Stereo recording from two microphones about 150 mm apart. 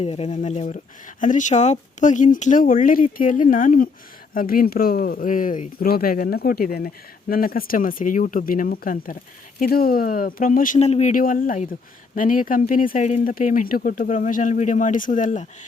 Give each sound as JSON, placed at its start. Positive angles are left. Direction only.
{"t": 0.0, "sound": "speech", "side_deg": 45}
{"t": 10.8, "sound": "speech", "side_deg": 45}
{"t": 11.1, "sound": "speech", "side_deg": 70}
{"t": 13.2, "sound": "speech", "side_deg": 65}